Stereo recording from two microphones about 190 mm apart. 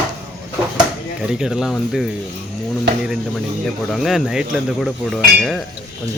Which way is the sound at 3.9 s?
Centre (ahead or behind).